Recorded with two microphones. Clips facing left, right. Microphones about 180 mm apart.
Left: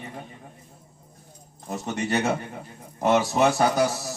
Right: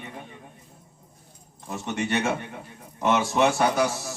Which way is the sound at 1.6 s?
40° left (ahead or behind).